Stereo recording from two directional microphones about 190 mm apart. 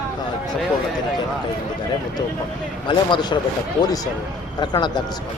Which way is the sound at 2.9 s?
25° left (ahead or behind).